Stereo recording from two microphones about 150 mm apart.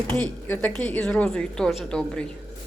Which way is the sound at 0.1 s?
10° left (ahead or behind).